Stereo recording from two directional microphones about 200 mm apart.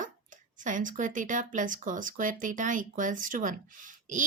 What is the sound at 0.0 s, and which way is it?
Speech, 40° right (ahead or behind).